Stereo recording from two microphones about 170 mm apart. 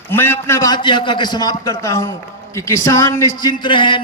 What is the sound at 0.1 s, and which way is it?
A man's voice, 15° left (ahead or behind).